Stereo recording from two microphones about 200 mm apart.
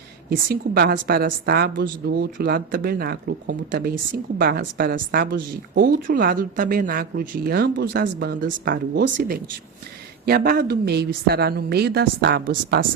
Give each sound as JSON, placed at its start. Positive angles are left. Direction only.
{"t": 0.3, "sound": "a woman's voice", "side_deg": -50}